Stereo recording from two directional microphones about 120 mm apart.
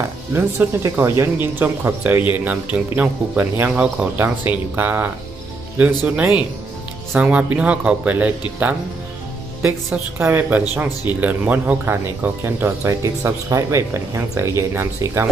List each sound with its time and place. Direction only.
0.3 s speech: 20° right (ahead or behind)
10.1 s speech: 15° right (ahead or behind)